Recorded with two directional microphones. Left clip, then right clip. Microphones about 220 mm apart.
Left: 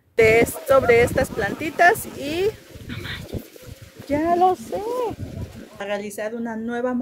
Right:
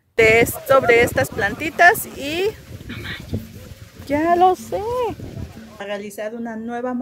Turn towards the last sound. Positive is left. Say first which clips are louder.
# left 1 dB
turn(degrees=5)  # may be behind; listen again after turning